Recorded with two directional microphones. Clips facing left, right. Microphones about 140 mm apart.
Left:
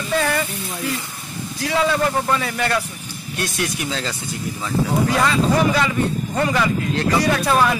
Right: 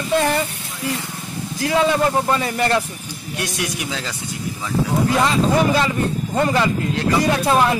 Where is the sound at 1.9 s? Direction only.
25° right (ahead or behind).